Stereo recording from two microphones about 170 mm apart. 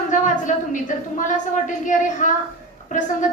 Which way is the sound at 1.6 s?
45° left (ahead or behind).